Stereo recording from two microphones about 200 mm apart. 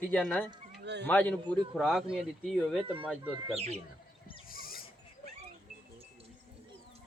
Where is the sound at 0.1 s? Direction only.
5° left (ahead or behind).